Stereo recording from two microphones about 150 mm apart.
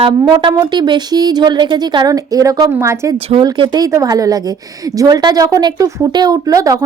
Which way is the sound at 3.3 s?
35° right (ahead or behind).